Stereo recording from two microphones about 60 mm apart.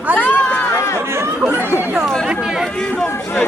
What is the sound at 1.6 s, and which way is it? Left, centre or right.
Chatter, left.